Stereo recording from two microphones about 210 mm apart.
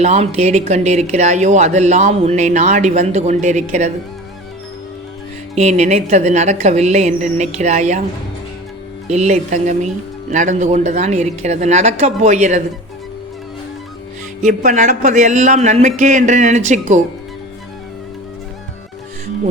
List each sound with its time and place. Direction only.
0.0 s speech: 30° right (ahead or behind)
5.5 s speech: 35° right (ahead or behind)
9.0 s speech: 30° right (ahead or behind)
14.4 s speech: 35° right (ahead or behind)